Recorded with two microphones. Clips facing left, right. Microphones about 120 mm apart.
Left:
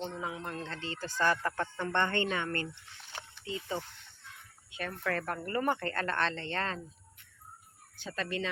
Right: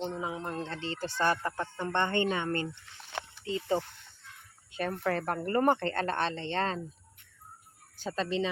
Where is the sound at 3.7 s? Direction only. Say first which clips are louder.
Right 6 dB; 40° right (ahead or behind); by 6.8 s 25° right (ahead or behind).